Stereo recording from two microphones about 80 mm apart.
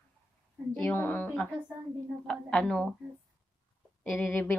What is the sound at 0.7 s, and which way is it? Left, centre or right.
Speech, centre.